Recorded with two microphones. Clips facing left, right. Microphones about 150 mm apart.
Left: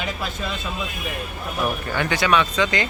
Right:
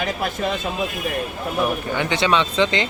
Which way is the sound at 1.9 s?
20° right (ahead or behind).